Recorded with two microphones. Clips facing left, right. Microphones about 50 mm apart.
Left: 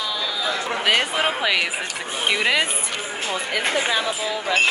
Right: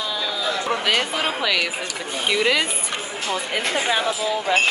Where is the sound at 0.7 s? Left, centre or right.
Centre.